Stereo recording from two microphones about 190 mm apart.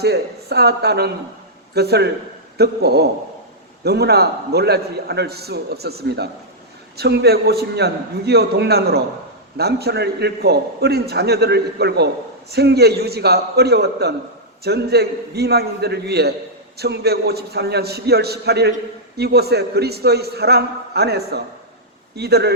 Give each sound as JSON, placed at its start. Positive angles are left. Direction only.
{"t": 0.0, "sound": "a man's voice", "side_deg": -60}